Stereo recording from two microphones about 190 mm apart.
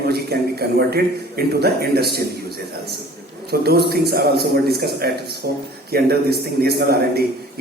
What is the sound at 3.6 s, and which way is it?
A man's voice, 55° right (ahead or behind).